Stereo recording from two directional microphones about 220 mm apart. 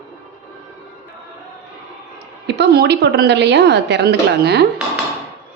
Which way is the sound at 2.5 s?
50° right (ahead or behind).